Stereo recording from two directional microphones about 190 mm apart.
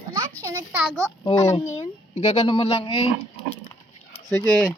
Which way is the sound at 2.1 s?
35° left (ahead or behind).